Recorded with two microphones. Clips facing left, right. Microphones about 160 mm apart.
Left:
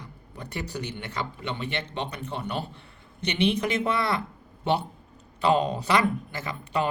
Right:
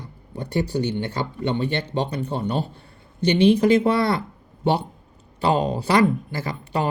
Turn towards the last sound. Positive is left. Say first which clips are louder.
# right 3 dB
turn(degrees=-35)  # may be behind; listen again after turning